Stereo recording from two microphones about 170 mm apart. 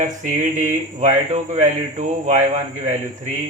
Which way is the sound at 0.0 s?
45° right (ahead or behind).